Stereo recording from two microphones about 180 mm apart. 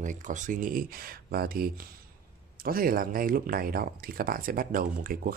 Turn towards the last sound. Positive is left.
turn(degrees=-50)  # may be behind; listen again after turning